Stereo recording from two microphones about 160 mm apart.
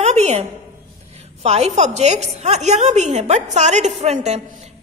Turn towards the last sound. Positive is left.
turn(degrees=-45)  # may be behind; listen again after turning